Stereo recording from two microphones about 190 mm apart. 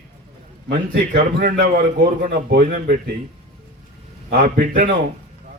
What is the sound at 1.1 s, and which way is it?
A man's voice, 55° right (ahead or behind).